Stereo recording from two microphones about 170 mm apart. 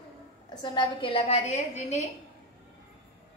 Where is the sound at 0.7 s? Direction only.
30° left (ahead or behind).